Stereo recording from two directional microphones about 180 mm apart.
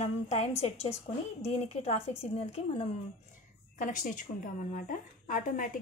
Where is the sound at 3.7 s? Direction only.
45° left (ahead or behind).